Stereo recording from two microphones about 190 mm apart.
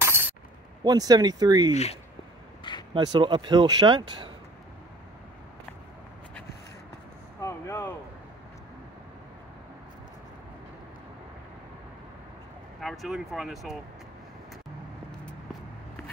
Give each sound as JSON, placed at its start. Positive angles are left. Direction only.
{"t": 0.0, "sound": "coin", "side_deg": -10}
{"t": 0.8, "sound": "speech", "side_deg": -20}
{"t": 1.7, "sound": "speech", "side_deg": 35}
{"t": 2.9, "sound": "speech", "side_deg": -25}
{"t": 7.3, "sound": "a sound", "side_deg": 15}
{"t": 12.8, "sound": "speech", "side_deg": 0}